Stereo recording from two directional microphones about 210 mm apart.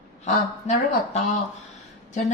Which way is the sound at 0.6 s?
35° left (ahead or behind).